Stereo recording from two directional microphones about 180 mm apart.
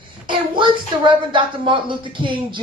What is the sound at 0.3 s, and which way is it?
Speech, 25° right (ahead or behind).